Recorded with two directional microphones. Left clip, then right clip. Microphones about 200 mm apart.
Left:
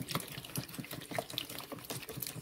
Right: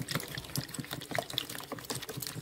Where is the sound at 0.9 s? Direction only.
10° right (ahead or behind).